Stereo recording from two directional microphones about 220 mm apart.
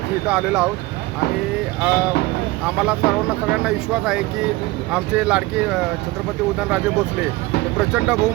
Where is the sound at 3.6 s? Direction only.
5° right (ahead or behind).